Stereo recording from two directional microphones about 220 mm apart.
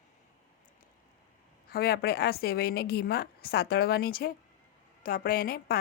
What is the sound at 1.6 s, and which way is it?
A woman's voice, 45° left (ahead or behind).